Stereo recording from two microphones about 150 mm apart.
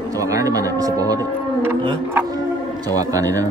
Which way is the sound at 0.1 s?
20° right (ahead or behind).